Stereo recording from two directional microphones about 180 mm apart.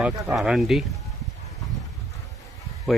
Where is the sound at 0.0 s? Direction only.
Centre (ahead or behind).